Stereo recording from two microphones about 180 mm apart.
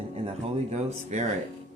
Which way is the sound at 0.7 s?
40° right (ahead or behind).